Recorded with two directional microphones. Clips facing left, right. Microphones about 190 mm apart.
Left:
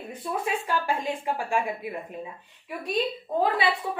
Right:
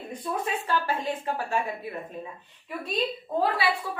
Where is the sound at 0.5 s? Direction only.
15° left (ahead or behind).